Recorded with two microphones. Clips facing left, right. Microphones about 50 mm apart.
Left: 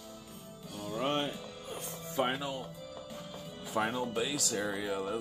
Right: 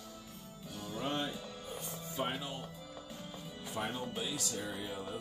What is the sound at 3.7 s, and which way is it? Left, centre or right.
Speech, left.